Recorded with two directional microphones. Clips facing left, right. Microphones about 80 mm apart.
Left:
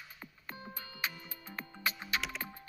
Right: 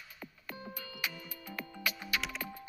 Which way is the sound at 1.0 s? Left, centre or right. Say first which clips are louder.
Left 1 dB; left.